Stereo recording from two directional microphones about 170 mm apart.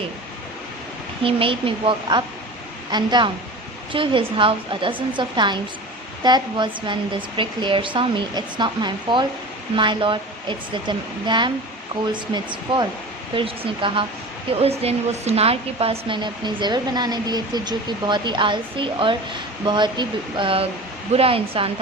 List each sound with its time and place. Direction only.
1.2 s speech: 30° right (ahead or behind)